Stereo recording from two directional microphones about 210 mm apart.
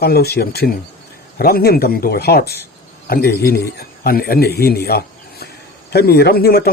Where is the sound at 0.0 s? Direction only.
50° left (ahead or behind).